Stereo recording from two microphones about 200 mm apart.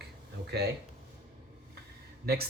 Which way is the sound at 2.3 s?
50° right (ahead or behind).